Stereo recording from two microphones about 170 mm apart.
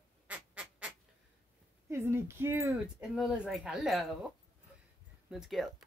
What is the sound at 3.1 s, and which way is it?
Speech, 5° right (ahead or behind).